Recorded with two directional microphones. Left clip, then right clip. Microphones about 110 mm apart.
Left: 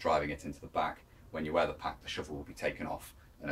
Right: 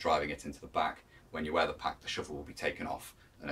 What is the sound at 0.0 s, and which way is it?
Speech, 5° right (ahead or behind).